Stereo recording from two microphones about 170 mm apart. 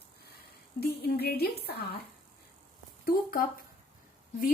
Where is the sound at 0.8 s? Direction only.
70° left (ahead or behind).